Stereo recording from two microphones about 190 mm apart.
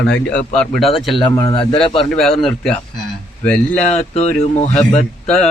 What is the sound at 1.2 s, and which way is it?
Speech, 25° left (ahead or behind).